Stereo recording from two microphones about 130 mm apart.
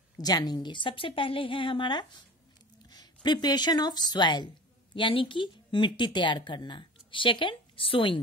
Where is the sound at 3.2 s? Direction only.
35° left (ahead or behind).